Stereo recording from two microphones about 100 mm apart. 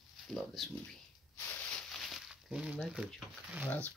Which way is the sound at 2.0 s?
Centre (ahead or behind).